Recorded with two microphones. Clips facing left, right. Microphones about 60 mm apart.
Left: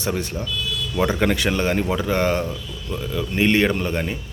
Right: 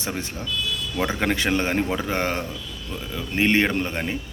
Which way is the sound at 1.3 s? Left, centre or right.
Right.